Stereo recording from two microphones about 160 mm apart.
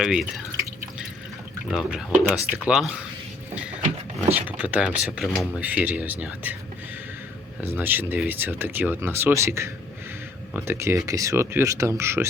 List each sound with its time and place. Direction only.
0.0 s speech: 5° right (ahead or behind)
1.7 s speech: 5° right (ahead or behind)
3.5 s a sound: 10° right (ahead or behind)
4.4 s speech: 10° right (ahead or behind)
7.8 s speech: 10° right (ahead or behind)